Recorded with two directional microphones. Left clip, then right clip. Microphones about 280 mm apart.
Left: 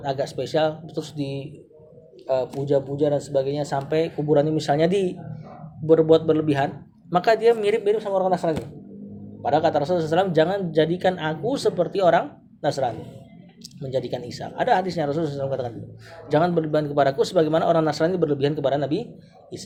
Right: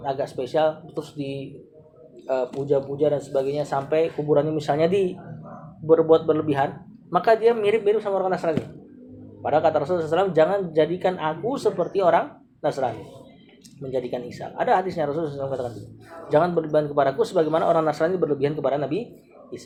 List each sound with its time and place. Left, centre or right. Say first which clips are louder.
0.0 s speech: left 1 dB; left
13.9 s speech: left 1 dB; left